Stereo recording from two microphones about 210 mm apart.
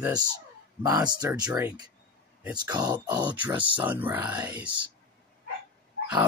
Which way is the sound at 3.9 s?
10° right (ahead or behind).